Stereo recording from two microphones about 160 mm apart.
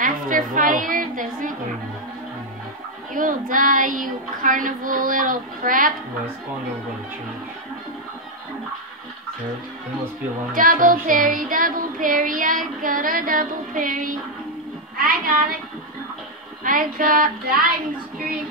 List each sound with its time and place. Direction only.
0.0 s a sound: 55° right (ahead or behind)
3.1 s music: 55° right (ahead or behind)
10.5 s music: 60° right (ahead or behind)
15.0 s speech: 60° right (ahead or behind)
16.6 s music: 60° right (ahead or behind)